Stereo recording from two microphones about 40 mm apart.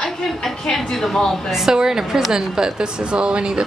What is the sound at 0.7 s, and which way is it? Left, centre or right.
Speech, centre.